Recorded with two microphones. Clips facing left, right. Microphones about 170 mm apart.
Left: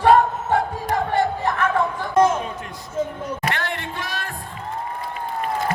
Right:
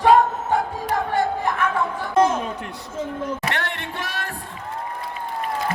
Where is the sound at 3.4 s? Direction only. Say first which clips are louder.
Left 1 dB; 65° right (ahead or behind).